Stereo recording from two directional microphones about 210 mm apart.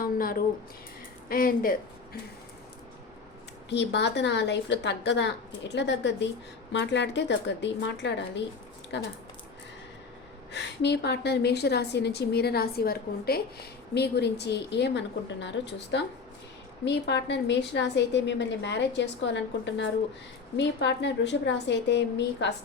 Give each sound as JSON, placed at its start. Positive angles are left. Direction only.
{"t": 0.0, "sound": "a sound", "side_deg": 45}
{"t": 1.3, "sound": "a woman's voice", "side_deg": 45}
{"t": 3.7, "sound": "a woman's voice", "side_deg": 55}
{"t": 10.5, "sound": "a woman's voice", "side_deg": 55}